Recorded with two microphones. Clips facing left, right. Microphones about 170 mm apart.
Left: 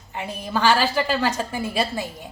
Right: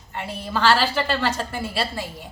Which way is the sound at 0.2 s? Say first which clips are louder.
Even; 15° left (ahead or behind).